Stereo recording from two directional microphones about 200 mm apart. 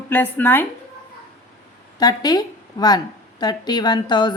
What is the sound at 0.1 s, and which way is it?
Speech, 10° left (ahead or behind).